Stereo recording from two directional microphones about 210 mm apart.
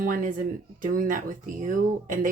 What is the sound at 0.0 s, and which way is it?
Speech, 40° right (ahead or behind).